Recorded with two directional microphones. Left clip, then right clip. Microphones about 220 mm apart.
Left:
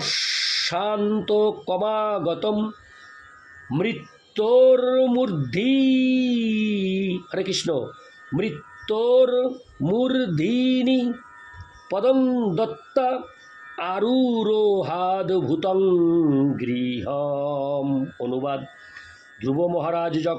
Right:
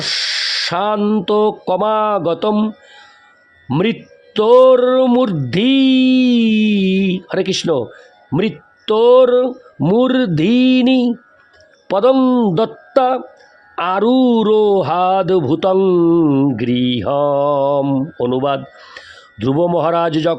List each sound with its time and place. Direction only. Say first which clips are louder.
0.0 s speech: right 6 dB; 45° right (ahead or behind)
3.7 s speech: right 8 dB; 45° right (ahead or behind)